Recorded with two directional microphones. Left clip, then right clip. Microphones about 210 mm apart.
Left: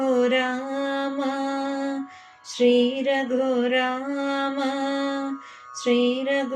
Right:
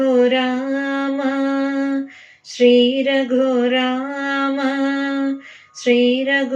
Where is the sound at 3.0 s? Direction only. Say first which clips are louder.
Right 6 dB; 30° left (ahead or behind).